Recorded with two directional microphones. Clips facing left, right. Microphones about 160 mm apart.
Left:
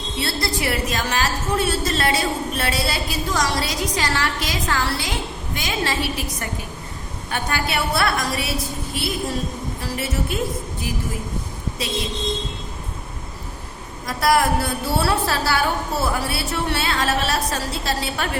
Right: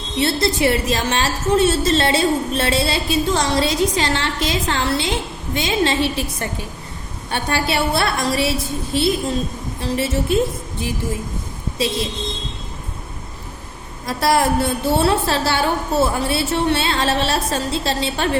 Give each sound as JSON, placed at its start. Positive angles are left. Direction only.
{"t": 0.2, "sound": "a woman's voice", "side_deg": -25}
{"t": 9.8, "sound": "a woman's voice", "side_deg": -25}
{"t": 11.8, "sound": "a woman's voice", "side_deg": -25}
{"t": 14.1, "sound": "a woman's voice", "side_deg": -25}